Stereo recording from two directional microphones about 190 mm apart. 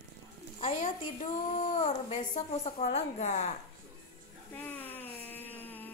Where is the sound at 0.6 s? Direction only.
40° left (ahead or behind).